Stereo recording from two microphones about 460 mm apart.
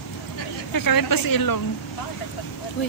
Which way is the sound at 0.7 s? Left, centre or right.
Left.